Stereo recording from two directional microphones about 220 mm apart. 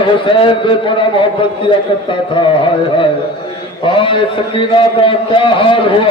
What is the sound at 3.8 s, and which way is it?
A man's voice, 25° left (ahead or behind).